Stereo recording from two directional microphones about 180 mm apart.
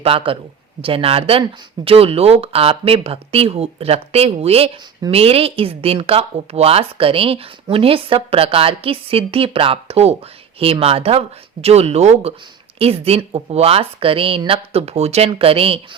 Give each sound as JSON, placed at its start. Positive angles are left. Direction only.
{"t": 0.0, "sound": "a woman's voice", "side_deg": -30}